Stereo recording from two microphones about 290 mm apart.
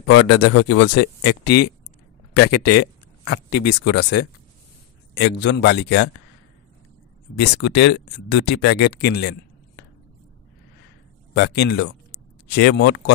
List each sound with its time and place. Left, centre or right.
0.0 s speech: left
3.6 s speech: left
5.1 s speech: left
7.3 s speech: left
11.3 s speech: left